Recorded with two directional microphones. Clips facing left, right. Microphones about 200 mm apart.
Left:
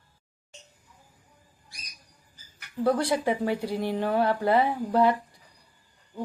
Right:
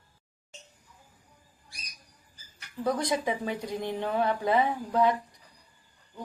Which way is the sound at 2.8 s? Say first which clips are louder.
Left 4 dB; 10° left (ahead or behind).